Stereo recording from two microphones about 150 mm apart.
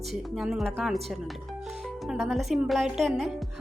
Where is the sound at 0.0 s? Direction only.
Centre (ahead or behind).